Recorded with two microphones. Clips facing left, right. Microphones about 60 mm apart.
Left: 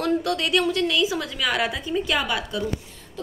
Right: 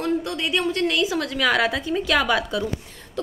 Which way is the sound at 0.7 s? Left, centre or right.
Right.